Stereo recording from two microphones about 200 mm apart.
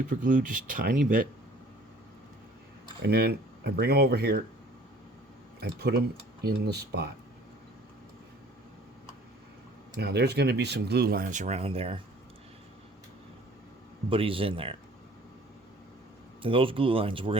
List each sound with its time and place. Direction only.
0.1 s speech: 40° right (ahead or behind)
3.0 s speech: 55° right (ahead or behind)
5.5 s speech: 55° right (ahead or behind)
9.9 s speech: 55° right (ahead or behind); by 11.9 s 30° right (ahead or behind)
14.1 s speech: 25° right (ahead or behind)
16.4 s speech: 25° right (ahead or behind)